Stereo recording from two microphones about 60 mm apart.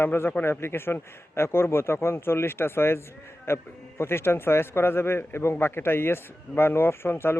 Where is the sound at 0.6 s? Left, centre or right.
Left.